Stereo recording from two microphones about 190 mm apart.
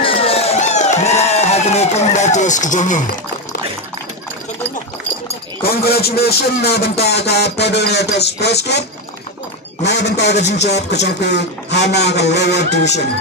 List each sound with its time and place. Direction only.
0.0 s a sound: 30° left (ahead or behind)
5.6 s speech: 55° left (ahead or behind)
9.8 s speech: 60° left (ahead or behind)